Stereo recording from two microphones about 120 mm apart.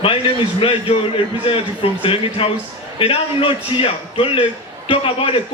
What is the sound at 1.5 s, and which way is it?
A man's voice, 55° left (ahead or behind).